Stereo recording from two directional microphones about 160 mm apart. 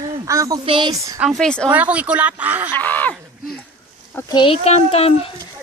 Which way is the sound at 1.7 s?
10° right (ahead or behind).